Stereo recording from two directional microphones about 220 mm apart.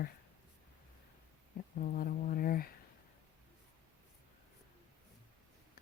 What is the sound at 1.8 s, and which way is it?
Speech, 40° left (ahead or behind).